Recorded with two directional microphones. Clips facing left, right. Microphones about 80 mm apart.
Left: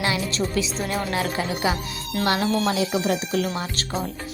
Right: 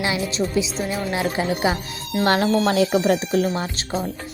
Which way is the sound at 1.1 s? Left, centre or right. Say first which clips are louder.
Right 3 dB; right.